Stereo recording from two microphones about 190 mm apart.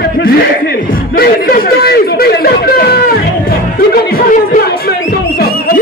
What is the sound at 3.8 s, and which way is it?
Music, 50° left (ahead or behind).